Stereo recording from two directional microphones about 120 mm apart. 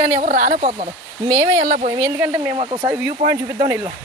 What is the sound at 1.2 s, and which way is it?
Speech, 25° right (ahead or behind).